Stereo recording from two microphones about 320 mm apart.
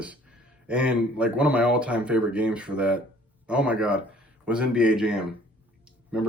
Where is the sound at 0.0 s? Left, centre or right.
Centre.